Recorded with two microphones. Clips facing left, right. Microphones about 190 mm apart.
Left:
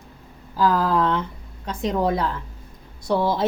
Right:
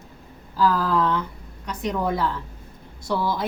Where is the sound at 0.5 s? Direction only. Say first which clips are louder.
Left 1 dB; 20° left (ahead or behind).